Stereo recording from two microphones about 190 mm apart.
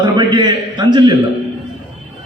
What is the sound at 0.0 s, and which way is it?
A man's voice, 25° right (ahead or behind).